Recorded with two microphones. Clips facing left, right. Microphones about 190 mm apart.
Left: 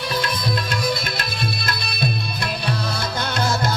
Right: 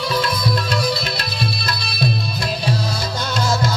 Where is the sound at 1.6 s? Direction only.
55° left (ahead or behind).